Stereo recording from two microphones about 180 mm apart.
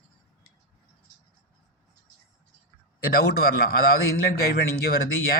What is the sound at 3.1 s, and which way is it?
Speech, 60° left (ahead or behind).